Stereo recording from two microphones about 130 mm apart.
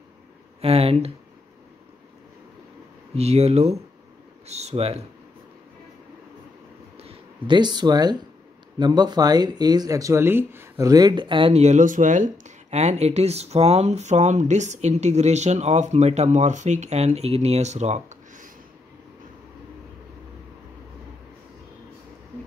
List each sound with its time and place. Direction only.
0.6 s speech: 50° right (ahead or behind)
3.2 s speech: 55° right (ahead or behind)
7.4 s speech: 35° right (ahead or behind); by 18.5 s 60° right (ahead or behind)